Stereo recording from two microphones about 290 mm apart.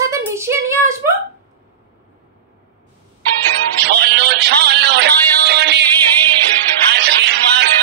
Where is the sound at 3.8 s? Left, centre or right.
Right.